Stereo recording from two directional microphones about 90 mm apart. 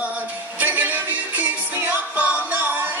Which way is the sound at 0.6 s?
20° right (ahead or behind).